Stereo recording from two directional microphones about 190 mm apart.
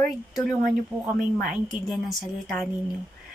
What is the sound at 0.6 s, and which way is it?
Speech, 45° right (ahead or behind).